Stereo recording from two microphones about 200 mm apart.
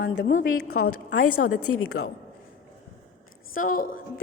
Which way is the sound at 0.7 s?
90° left.